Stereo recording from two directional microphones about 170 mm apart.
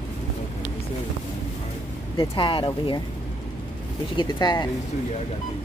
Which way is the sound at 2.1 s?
30° left (ahead or behind).